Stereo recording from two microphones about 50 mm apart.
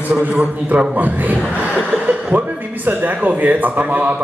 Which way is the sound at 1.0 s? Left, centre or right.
Right.